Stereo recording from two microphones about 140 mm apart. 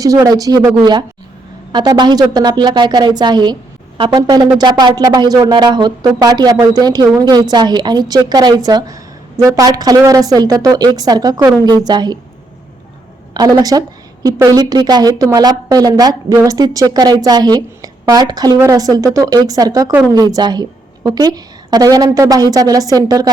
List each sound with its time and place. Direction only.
0.0 s a woman's voice: 25° right (ahead or behind)
13.3 s a woman's voice: 25° right (ahead or behind)